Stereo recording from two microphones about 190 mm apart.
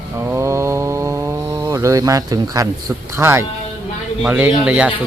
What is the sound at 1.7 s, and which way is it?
Speech, 15° right (ahead or behind).